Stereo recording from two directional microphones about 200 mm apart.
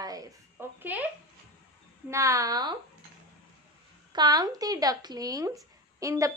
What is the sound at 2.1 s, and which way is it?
Speech, 15° right (ahead or behind).